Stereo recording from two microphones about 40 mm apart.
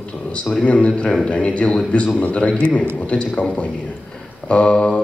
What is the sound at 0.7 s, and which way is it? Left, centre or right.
A man's voice, left.